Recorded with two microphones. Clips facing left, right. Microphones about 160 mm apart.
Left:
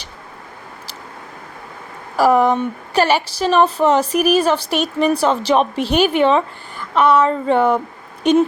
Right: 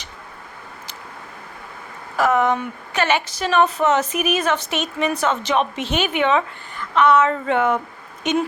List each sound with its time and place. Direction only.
2.1 s a woman's voice: 35° left (ahead or behind)